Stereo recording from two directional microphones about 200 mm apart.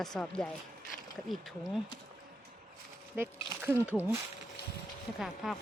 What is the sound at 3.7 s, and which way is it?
Speech, 10° left (ahead or behind).